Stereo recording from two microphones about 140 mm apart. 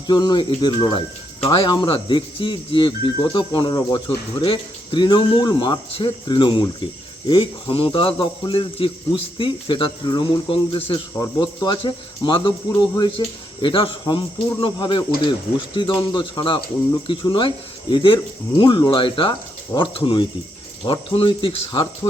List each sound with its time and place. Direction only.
0.1 s speech: 30° left (ahead or behind)